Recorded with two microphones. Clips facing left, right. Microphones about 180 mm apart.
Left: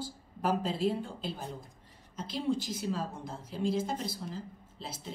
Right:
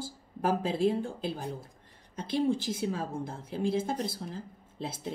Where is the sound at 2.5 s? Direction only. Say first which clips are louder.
Right 2 dB; 55° right (ahead or behind).